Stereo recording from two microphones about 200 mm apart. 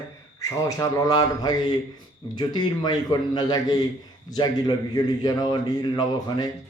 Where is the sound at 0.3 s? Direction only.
20° left (ahead or behind).